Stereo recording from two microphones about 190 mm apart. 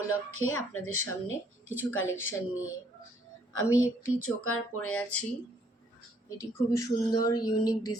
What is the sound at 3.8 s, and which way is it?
Speech, 90° left.